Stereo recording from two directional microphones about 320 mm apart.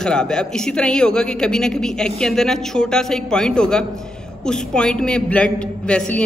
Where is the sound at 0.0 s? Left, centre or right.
Centre.